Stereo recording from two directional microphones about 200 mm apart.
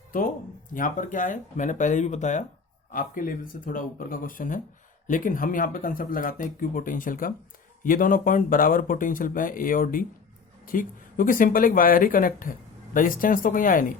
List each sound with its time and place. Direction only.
0.1 s speech: 45° left (ahead or behind)